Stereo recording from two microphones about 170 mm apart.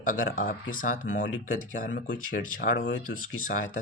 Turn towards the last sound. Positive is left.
turn(degrees=55)  # may be behind; listen again after turning